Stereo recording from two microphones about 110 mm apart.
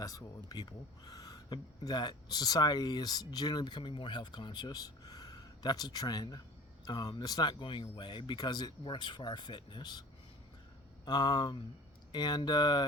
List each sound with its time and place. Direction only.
0.0 s speech: 30° left (ahead or behind)
11.0 s speech: 40° left (ahead or behind)